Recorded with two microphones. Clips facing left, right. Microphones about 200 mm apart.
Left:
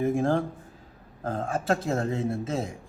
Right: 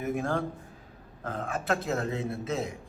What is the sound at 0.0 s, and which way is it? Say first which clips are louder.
A man's voice: left 5 dB; 25° left (ahead or behind).